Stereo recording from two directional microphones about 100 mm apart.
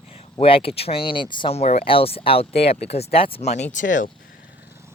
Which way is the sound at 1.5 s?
90° left.